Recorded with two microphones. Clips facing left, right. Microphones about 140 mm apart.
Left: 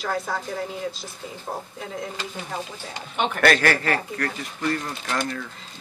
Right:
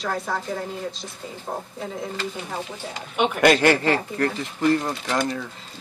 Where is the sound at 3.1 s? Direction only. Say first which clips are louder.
Right 3 dB; 5° right (ahead or behind).